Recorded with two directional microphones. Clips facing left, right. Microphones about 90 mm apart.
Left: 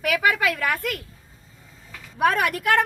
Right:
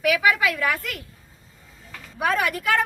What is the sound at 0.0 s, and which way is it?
Speech, 50° left (ahead or behind).